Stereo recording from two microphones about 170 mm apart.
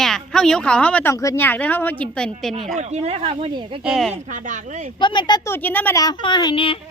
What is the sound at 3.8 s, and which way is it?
Speech, centre (ahead or behind).